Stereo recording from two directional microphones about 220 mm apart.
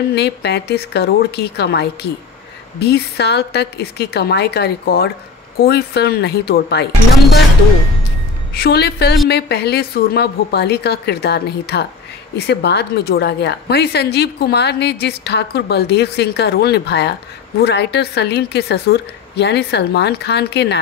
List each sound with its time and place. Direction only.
0.1 s a woman's voice: 50° left (ahead or behind)
8.5 s a woman's voice: 45° left (ahead or behind)